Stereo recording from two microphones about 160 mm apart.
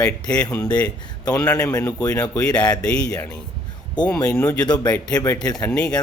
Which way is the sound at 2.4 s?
5° left (ahead or behind).